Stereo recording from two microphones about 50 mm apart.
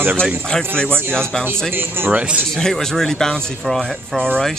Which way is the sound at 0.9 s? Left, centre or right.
Right.